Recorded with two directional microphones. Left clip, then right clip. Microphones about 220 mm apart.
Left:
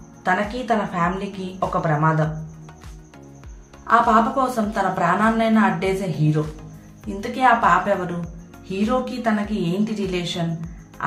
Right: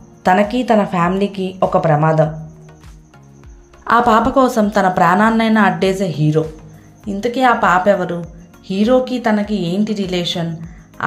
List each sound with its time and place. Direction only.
0.2 s a woman's voice: 35° right (ahead or behind)
3.8 s a woman's voice: 35° right (ahead or behind)
11.0 s music: 30° right (ahead or behind)